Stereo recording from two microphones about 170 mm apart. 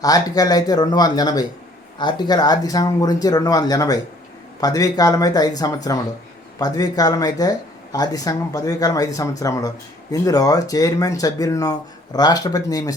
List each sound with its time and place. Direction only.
0.0 s speech: 20° left (ahead or behind)